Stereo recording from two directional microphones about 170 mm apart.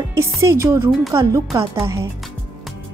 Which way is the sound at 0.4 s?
20° right (ahead or behind).